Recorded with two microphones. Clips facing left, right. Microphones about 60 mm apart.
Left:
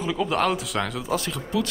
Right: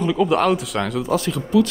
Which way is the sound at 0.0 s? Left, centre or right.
Centre.